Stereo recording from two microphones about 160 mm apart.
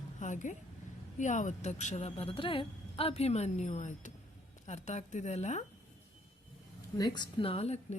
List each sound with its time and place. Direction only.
0.2 s a sound: 50° left (ahead or behind)
1.2 s a woman's voice: 50° left (ahead or behind)
7.0 s a woman's voice: 30° left (ahead or behind)